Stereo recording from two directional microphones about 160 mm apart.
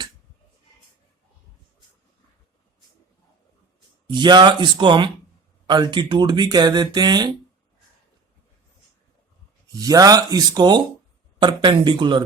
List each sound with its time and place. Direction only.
4.0 s speech: 30° right (ahead or behind)
9.7 s speech: 25° right (ahead or behind)